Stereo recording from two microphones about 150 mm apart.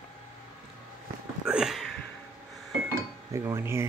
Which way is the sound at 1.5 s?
5° right (ahead or behind).